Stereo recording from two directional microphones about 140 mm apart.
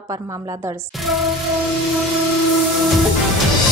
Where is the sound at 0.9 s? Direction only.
Centre (ahead or behind).